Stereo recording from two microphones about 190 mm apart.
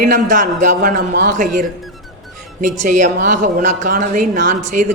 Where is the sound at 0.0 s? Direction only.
45° right (ahead or behind).